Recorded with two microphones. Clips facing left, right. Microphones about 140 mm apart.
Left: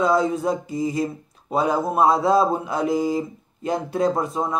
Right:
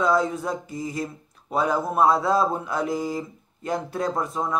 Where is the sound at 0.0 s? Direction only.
20° left (ahead or behind).